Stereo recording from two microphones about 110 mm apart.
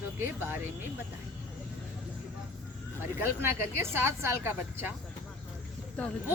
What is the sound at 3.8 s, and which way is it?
Speech, 25° right (ahead or behind).